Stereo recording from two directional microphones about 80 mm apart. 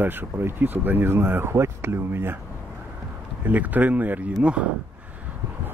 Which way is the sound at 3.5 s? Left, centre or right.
Right.